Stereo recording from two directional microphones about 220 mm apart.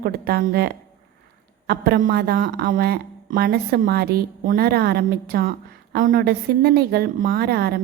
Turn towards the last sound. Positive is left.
turn(degrees=-45)  # may be behind; listen again after turning